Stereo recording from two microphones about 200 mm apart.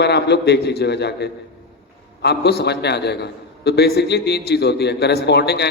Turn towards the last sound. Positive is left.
turn(degrees=55)  # may be behind; listen again after turning